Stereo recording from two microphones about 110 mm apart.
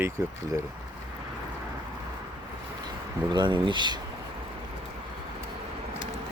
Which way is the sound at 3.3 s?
45° right (ahead or behind).